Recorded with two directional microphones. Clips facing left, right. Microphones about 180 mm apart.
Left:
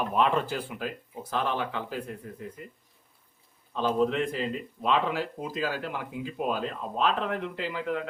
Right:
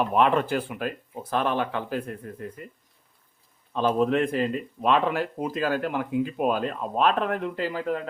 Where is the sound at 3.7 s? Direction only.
55° right (ahead or behind).